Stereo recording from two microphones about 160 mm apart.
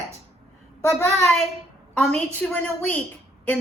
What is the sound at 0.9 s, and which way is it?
A woman's voice, centre (ahead or behind).